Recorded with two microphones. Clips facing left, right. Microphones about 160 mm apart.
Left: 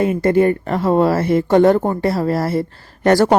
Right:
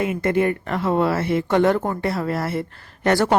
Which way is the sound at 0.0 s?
35° left (ahead or behind).